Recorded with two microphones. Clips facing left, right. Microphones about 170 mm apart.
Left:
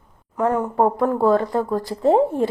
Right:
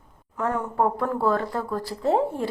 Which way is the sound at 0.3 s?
15° left (ahead or behind).